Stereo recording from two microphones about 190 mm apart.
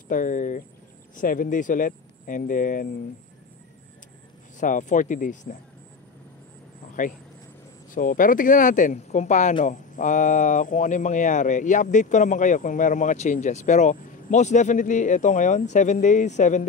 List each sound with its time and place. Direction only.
0.1 s speech: 45° left (ahead or behind)
4.6 s speech: 40° left (ahead or behind)
7.9 s speech: 45° left (ahead or behind)